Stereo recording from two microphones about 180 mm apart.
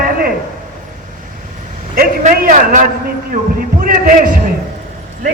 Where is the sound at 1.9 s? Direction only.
50° right (ahead or behind).